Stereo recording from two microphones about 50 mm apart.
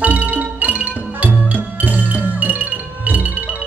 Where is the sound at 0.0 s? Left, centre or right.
Right.